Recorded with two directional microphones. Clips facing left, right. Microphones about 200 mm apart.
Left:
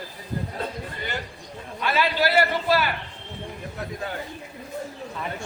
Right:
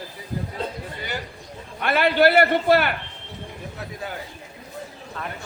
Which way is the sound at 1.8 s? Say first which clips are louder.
Right 5 dB; 60° right (ahead or behind).